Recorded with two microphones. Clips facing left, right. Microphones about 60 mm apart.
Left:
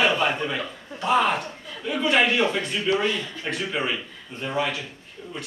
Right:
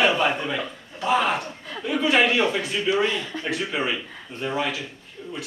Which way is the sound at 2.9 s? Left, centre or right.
Right.